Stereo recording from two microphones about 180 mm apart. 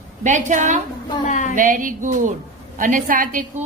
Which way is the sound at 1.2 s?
45° left (ahead or behind).